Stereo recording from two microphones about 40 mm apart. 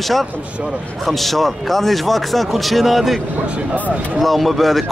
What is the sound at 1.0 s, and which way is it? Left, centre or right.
Speech, centre.